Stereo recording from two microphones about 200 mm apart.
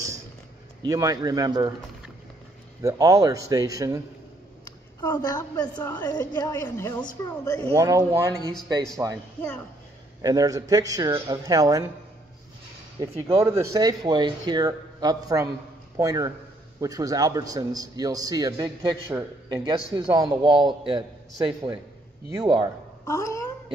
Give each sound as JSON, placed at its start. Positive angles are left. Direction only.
{"t": 0.8, "sound": "a man's voice", "side_deg": -15}
{"t": 2.8, "sound": "a man's voice", "side_deg": -15}
{"t": 4.6, "sound": "a woman's voice", "side_deg": 20}
{"t": 7.7, "sound": "a man's voice", "side_deg": -15}
{"t": 10.2, "sound": "a man's voice", "side_deg": -20}
{"t": 13.0, "sound": "a man's voice", "side_deg": -15}
{"t": 22.3, "sound": "a man's voice", "side_deg": -20}
{"t": 23.0, "sound": "speech", "side_deg": 15}